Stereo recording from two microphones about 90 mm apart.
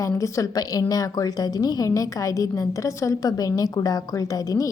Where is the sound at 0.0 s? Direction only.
35° left (ahead or behind).